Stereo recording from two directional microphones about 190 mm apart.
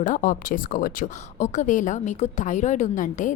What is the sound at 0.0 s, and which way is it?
A woman's voice, 45° left (ahead or behind).